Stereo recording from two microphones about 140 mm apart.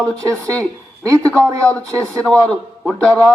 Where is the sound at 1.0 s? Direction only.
25° right (ahead or behind).